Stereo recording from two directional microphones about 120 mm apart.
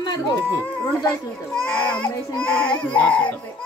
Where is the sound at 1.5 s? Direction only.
10° left (ahead or behind).